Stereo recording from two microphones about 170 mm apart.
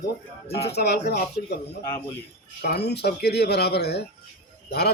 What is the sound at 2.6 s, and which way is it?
Speech, 70° left (ahead or behind).